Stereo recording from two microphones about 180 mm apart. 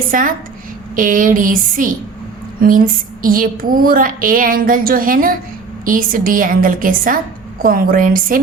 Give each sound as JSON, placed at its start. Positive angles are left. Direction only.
{"t": 0.1, "sound": "speech", "side_deg": -50}